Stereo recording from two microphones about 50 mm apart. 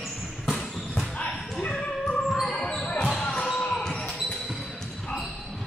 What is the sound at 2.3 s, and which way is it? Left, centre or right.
Basketball bounce, centre.